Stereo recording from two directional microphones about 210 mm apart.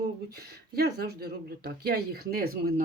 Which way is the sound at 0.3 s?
50° right (ahead or behind).